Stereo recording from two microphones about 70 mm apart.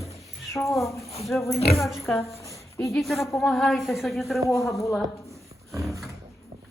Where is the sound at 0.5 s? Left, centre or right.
Centre.